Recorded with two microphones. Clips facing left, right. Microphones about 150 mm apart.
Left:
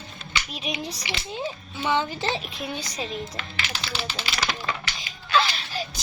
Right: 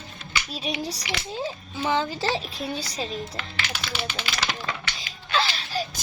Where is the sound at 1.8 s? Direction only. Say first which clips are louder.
Even; 35° right (ahead or behind).